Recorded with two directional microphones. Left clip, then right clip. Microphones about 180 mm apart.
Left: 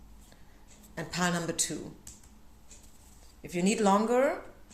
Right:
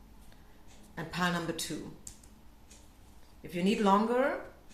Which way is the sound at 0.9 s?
35° left (ahead or behind).